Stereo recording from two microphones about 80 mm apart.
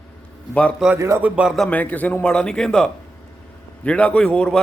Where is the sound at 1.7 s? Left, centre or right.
Left.